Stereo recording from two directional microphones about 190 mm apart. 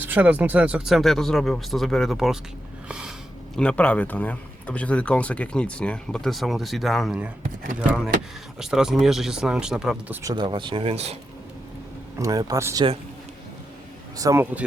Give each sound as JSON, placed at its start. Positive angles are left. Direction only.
{"t": 0.0, "sound": "speech", "side_deg": -10}
{"t": 3.5, "sound": "speech", "side_deg": 5}
{"t": 10.2, "sound": "speech", "side_deg": -25}
{"t": 12.1, "sound": "speech", "side_deg": -20}
{"t": 14.2, "sound": "speech", "side_deg": -15}